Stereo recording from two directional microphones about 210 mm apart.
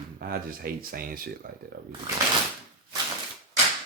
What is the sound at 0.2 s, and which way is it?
Speech, 45° right (ahead or behind).